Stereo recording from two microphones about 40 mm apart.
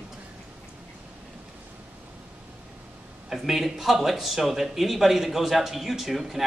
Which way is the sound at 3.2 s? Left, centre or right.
Centre.